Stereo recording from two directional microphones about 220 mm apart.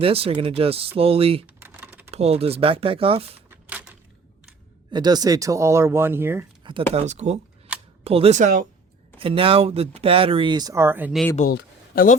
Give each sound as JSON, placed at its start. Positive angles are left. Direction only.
{"t": 0.0, "sound": "speech", "side_deg": -25}
{"t": 1.5, "sound": "typing", "side_deg": -10}
{"t": 2.0, "sound": "speech", "side_deg": -30}
{"t": 3.5, "sound": "typewriter", "side_deg": -5}
{"t": 4.9, "sound": "speech", "side_deg": -20}
{"t": 6.6, "sound": "a sound", "side_deg": -20}
{"t": 6.9, "sound": "speech", "side_deg": -30}
{"t": 7.7, "sound": "camera", "side_deg": -5}
{"t": 8.0, "sound": "speech", "side_deg": -25}
{"t": 11.5, "sound": "a sound", "side_deg": 40}